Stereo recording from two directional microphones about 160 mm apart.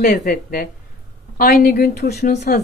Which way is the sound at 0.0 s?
55° left (ahead or behind).